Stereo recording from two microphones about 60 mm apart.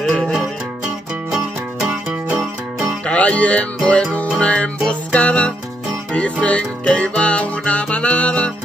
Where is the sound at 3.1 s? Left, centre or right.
Left.